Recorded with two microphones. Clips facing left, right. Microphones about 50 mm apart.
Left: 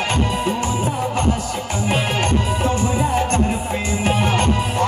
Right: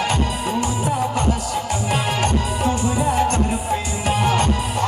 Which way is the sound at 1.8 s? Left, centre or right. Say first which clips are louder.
Left 3 dB; left.